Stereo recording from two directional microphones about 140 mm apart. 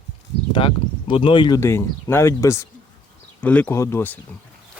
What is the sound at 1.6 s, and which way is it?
Speech, 20° left (ahead or behind).